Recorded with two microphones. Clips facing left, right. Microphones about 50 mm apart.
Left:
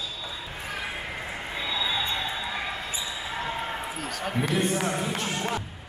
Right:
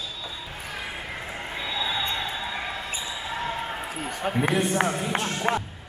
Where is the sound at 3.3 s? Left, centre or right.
Centre.